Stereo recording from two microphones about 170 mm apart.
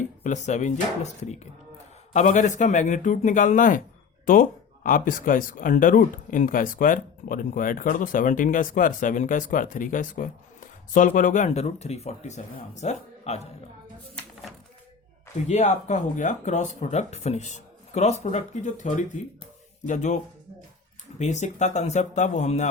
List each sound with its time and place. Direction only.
0.2 s speech: 45° left (ahead or behind)
2.1 s speech: 45° left (ahead or behind)
15.4 s speech: 45° left (ahead or behind)
21.2 s speech: 45° left (ahead or behind)